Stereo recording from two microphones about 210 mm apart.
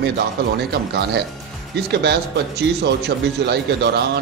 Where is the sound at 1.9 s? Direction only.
50° right (ahead or behind).